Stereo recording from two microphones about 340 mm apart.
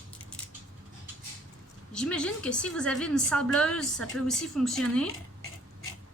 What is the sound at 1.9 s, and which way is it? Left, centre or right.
A woman's voice, centre.